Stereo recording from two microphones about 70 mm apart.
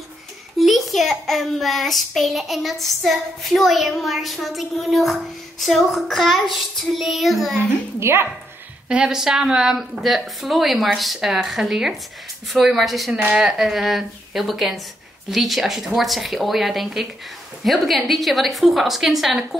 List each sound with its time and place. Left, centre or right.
0.6 s child singing: centre
8.0 s speech: right
8.8 s child singing: centre